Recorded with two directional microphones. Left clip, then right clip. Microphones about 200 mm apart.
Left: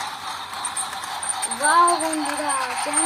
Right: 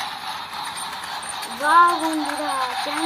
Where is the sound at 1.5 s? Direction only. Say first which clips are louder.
Right 2 dB; 20° left (ahead or behind).